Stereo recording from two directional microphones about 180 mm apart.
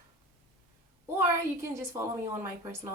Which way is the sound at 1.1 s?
15° right (ahead or behind).